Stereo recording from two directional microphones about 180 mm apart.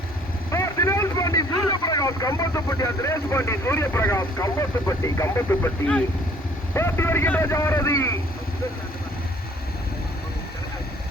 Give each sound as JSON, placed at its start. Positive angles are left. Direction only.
{"t": 0.5, "sound": "a man's voice", "side_deg": 15}